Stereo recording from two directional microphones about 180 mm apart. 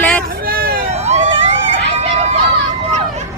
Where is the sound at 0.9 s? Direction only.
40° right (ahead or behind).